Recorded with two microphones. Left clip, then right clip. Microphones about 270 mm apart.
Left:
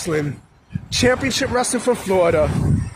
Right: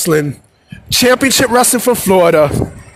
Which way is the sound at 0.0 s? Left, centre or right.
Right.